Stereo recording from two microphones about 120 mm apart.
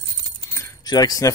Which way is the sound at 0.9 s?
30° left (ahead or behind).